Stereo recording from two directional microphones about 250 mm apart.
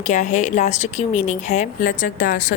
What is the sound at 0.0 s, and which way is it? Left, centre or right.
Speech, left.